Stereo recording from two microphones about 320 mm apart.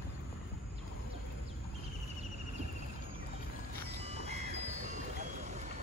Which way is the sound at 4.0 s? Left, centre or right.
Centre.